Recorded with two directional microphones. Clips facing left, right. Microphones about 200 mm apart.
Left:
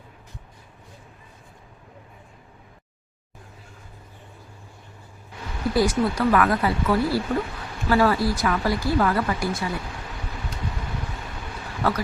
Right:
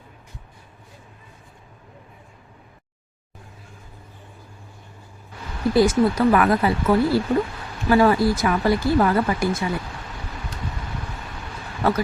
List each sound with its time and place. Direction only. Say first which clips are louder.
5.7 s speech: right 4 dB; 25° right (ahead or behind)
11.8 s speech: right 4 dB; 25° right (ahead or behind)